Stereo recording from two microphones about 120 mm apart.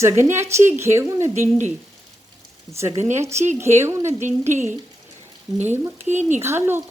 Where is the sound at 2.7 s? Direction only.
35° right (ahead or behind).